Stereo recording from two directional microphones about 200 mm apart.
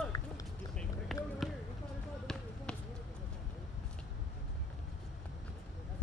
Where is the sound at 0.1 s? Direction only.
15° left (ahead or behind).